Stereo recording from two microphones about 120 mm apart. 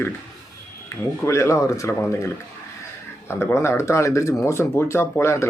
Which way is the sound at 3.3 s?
20° left (ahead or behind).